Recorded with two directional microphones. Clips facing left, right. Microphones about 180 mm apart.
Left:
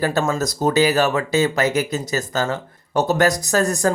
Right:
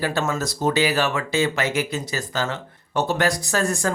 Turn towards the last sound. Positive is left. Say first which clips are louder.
# left 4 dB
turn(degrees=40)  # may be behind; listen again after turning